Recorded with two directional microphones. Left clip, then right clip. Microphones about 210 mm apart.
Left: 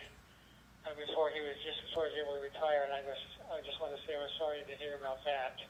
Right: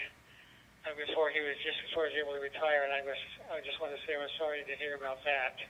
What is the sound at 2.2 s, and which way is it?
Speech, 20° right (ahead or behind).